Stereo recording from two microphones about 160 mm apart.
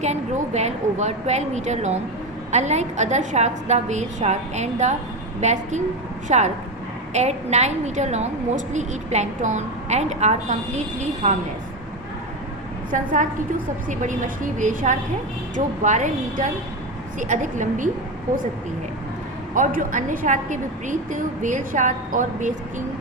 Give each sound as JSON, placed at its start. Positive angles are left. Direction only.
{"t": 0.0, "sound": "a woman's voice", "side_deg": -45}
{"t": 12.9, "sound": "a woman's voice", "side_deg": -55}
{"t": 19.5, "sound": "a woman's voice", "side_deg": -55}